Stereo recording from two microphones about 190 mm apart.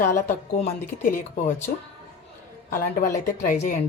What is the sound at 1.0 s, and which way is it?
Speech, 45° left (ahead or behind).